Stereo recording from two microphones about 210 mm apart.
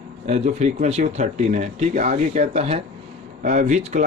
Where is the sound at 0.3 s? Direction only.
30° right (ahead or behind).